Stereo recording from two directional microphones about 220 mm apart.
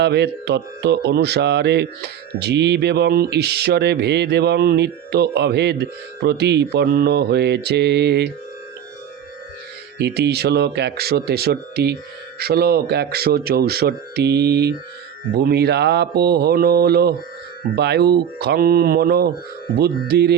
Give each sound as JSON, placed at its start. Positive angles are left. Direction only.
{"t": 0.0, "sound": "speech", "side_deg": -50}
{"t": 10.0, "sound": "speech", "side_deg": -50}